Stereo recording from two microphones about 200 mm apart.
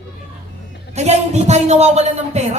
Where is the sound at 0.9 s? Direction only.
35° right (ahead or behind).